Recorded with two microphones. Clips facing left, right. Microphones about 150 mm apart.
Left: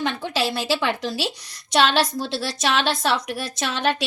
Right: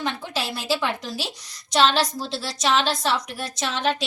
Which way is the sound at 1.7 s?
60° left (ahead or behind).